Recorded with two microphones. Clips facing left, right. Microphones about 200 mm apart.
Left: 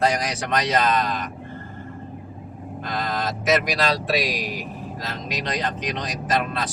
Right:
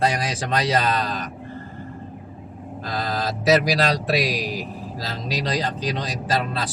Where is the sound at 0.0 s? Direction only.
30° right (ahead or behind).